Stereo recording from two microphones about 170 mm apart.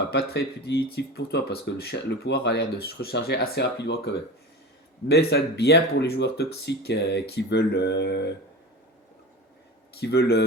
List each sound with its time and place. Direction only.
0.1 s speech: 70° left (ahead or behind)
10.0 s speech: 75° left (ahead or behind)